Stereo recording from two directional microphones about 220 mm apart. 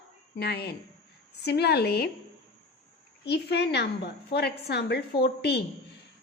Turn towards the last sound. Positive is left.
turn(degrees=45)  # may be behind; listen again after turning